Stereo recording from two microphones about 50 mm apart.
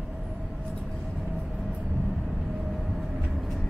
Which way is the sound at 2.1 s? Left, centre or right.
Centre.